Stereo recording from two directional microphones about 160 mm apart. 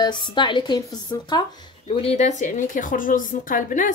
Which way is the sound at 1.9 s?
40° left (ahead or behind).